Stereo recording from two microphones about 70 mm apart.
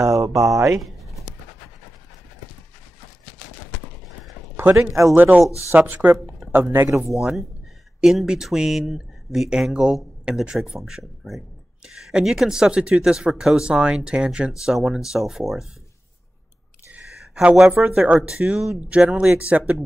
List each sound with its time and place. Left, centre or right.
0.0 s mantra: right
5.1 s speech: right
7.2 s speech: centre
16.9 s a sound: centre
17.8 s speech: centre